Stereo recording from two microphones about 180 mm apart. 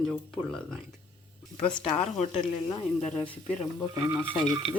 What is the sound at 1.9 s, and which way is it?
Speech, 35° left (ahead or behind).